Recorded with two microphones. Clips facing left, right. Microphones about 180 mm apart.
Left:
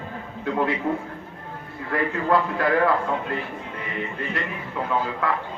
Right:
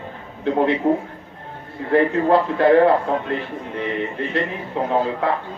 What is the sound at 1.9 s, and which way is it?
A man's voice, 30° right (ahead or behind).